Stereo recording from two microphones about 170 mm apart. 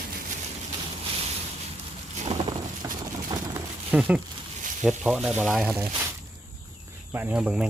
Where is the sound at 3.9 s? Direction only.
10° right (ahead or behind).